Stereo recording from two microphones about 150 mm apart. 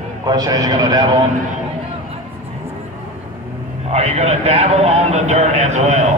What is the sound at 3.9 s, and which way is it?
A man's voice, 45° right (ahead or behind).